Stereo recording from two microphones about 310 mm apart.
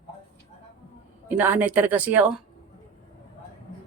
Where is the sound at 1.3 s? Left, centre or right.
Centre.